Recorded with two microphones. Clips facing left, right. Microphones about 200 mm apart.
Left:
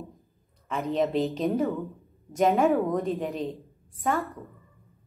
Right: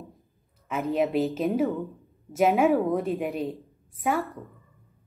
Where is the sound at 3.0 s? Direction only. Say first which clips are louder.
Right 1 dB; 15° right (ahead or behind).